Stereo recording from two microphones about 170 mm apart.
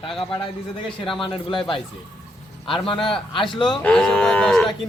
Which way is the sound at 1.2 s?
30° left (ahead or behind).